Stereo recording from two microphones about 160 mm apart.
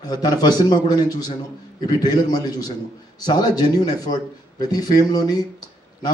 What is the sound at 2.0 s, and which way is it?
A man's voice, 25° left (ahead or behind).